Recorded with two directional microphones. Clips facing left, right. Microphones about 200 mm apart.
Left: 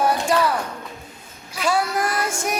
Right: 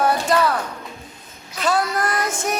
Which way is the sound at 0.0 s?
10° left (ahead or behind).